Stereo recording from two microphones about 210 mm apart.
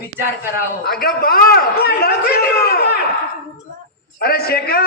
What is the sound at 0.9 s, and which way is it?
A man's voice, 45° left (ahead or behind).